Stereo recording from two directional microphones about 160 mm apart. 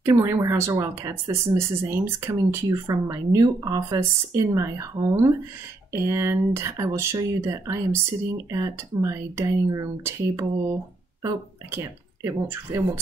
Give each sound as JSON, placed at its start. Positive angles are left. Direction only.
{"t": 0.0, "sound": "speech", "side_deg": -15}